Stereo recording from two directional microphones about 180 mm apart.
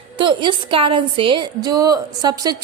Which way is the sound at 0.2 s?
25° right (ahead or behind).